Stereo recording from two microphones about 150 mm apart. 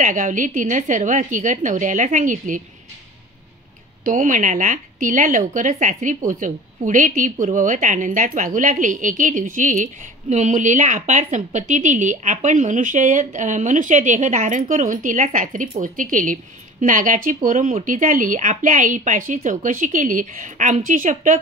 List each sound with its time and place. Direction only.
0.0 s a woman's voice: 60° right (ahead or behind)
4.0 s a woman's voice: 60° right (ahead or behind)